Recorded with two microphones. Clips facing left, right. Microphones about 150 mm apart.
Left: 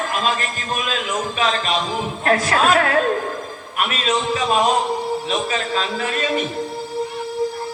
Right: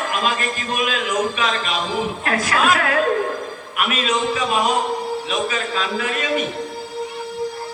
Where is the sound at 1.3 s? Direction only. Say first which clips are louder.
Left 2 dB; 35° left (ahead or behind).